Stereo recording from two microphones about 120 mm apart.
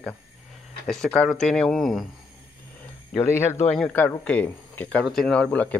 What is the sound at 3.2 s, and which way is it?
Speech, 20° left (ahead or behind).